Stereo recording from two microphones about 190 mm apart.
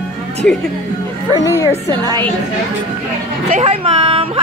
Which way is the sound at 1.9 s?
20° right (ahead or behind).